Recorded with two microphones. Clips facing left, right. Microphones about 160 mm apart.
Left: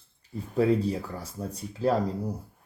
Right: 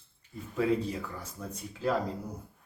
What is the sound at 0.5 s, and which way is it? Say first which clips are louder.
Speech: left 5 dB; 35° left (ahead or behind).